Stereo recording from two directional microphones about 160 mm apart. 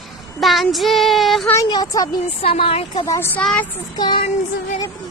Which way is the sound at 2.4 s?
35° left (ahead or behind).